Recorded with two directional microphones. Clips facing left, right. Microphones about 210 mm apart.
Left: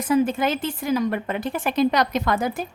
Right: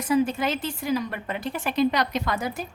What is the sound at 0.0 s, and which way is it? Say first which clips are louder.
A woman's voice: left 3 dB; 50° left (ahead or behind).